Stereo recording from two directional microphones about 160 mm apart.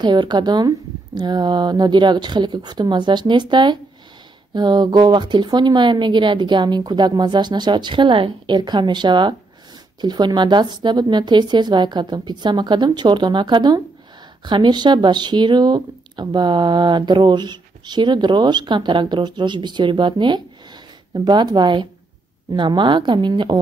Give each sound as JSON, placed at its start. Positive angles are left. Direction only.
{"t": 0.0, "sound": "speech", "side_deg": -25}